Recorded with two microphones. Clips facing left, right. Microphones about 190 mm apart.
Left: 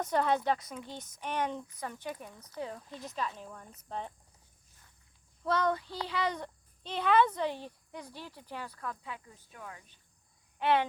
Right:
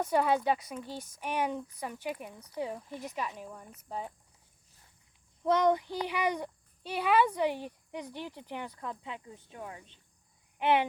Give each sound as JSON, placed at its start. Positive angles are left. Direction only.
{"t": 0.0, "sound": "a child's voice", "side_deg": -10}
{"t": 5.4, "sound": "a child's voice", "side_deg": -20}
{"t": 10.6, "sound": "a sound", "side_deg": -15}